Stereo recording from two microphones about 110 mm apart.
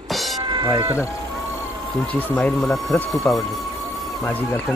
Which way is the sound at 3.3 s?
15° left (ahead or behind).